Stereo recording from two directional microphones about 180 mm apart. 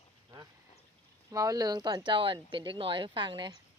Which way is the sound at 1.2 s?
20° right (ahead or behind).